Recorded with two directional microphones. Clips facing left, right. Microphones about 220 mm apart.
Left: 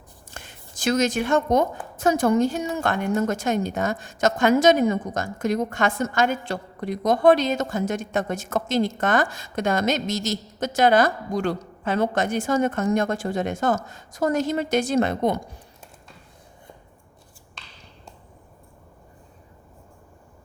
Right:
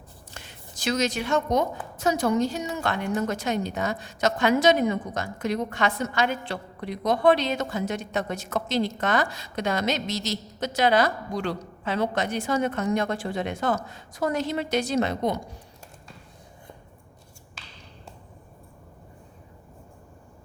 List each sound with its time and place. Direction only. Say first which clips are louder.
0.3 s a woman's voice: left 2 dB; 50° left (ahead or behind)